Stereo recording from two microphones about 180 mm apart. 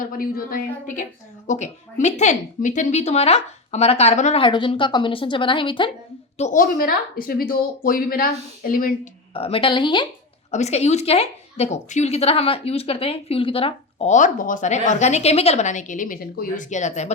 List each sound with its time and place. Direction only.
0.0 s speech: 50° left (ahead or behind)
1.5 s a woman's voice: 40° left (ahead or behind)
4.4 s a woman's voice: 25° left (ahead or behind)
6.3 s speech: 40° left (ahead or behind)
9.3 s a woman's voice: 30° left (ahead or behind)
10.5 s a woman's voice: 40° left (ahead or behind)